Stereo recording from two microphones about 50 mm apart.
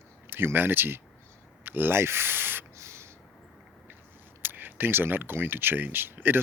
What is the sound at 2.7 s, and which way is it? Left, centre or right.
Spray, right.